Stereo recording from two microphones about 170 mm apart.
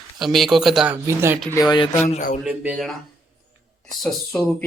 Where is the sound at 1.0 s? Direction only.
15° right (ahead or behind).